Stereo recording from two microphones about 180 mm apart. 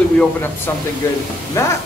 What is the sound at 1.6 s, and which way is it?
Speech, 15° left (ahead or behind).